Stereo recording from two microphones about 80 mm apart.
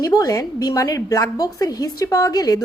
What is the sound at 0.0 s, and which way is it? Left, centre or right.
A woman's voice, left.